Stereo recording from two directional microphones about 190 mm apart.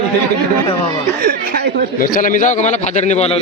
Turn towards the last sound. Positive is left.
turn(degrees=35)  # may be behind; listen again after turning